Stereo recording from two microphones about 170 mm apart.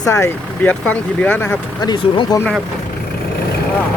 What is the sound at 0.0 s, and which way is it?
Speech, 15° left (ahead or behind).